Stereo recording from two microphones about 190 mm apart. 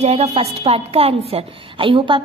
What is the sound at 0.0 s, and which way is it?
A woman's voice, 35° right (ahead or behind).